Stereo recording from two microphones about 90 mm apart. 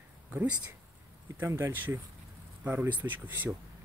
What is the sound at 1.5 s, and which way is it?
Speech, 25° right (ahead or behind).